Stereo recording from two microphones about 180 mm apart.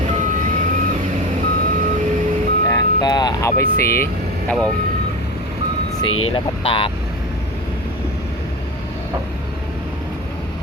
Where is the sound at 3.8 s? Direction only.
15° left (ahead or behind).